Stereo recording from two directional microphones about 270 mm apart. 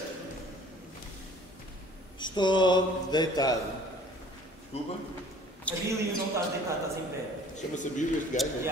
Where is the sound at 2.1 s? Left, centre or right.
Centre.